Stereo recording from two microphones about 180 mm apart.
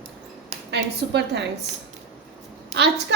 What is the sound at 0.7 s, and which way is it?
Speech, 70° right (ahead or behind).